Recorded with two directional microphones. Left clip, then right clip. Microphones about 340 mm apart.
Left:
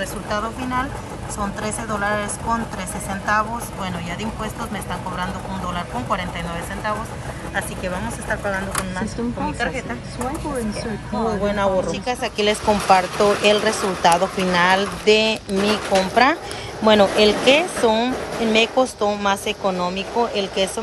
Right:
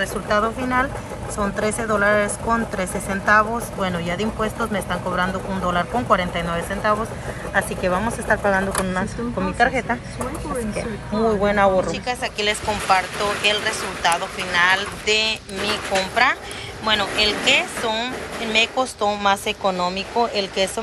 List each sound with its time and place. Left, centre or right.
0.3 s a woman's voice: centre
11.4 s speech: centre